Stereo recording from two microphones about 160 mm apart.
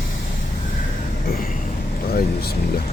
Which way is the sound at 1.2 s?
65° left (ahead or behind).